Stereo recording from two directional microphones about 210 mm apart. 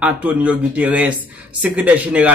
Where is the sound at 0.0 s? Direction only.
5° right (ahead or behind).